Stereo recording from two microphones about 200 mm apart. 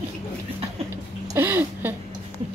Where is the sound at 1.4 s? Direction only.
10° right (ahead or behind).